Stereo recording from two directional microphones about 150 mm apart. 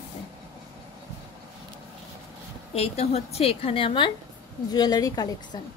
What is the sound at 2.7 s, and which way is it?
Speech, 45° left (ahead or behind).